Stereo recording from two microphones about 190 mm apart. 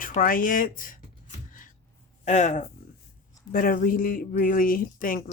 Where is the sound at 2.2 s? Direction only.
35° left (ahead or behind).